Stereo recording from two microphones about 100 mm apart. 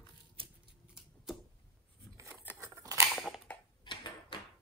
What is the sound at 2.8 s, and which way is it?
Scissors, 30° right (ahead or behind).